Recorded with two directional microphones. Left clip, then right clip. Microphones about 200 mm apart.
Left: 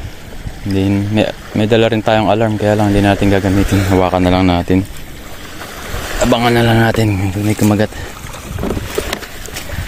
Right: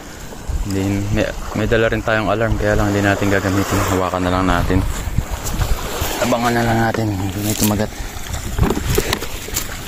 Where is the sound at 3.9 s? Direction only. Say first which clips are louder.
Left 9 dB; 50° left (ahead or behind).